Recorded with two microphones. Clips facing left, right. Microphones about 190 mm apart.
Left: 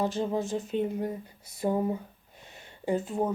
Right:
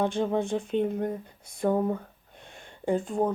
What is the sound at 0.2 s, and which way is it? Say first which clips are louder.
Speech: right 3 dB; 55° right (ahead or behind).